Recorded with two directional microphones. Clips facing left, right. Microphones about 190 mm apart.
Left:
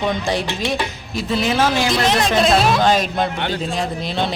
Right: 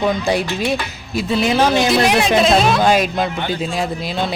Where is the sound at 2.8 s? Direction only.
10° right (ahead or behind).